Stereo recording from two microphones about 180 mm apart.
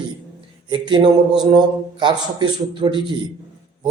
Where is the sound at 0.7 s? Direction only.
25° right (ahead or behind).